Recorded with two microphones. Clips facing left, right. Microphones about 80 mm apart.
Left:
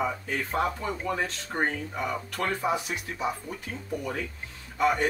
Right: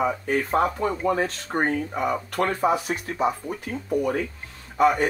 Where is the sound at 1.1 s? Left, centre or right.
Right.